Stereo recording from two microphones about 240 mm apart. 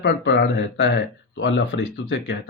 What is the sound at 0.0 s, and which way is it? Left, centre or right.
Speech, left.